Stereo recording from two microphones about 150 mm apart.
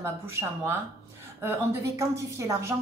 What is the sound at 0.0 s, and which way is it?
A woman's voice, 15° right (ahead or behind).